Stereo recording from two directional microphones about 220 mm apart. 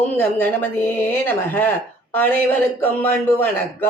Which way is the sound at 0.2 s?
10° left (ahead or behind).